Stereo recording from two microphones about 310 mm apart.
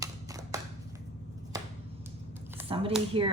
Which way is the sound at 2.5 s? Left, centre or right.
Centre.